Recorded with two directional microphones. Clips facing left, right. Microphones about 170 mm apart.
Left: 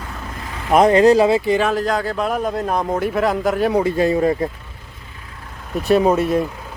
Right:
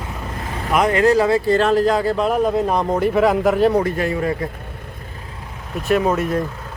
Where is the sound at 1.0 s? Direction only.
20° left (ahead or behind).